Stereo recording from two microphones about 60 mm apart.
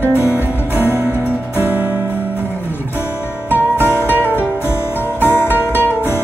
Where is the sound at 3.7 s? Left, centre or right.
Left.